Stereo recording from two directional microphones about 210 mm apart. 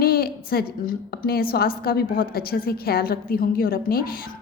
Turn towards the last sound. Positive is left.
turn(degrees=45)  # may be behind; listen again after turning